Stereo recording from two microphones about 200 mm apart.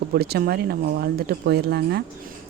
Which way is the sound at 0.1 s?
50° right (ahead or behind).